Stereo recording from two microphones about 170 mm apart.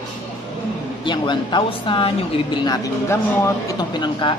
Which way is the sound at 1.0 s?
25° left (ahead or behind).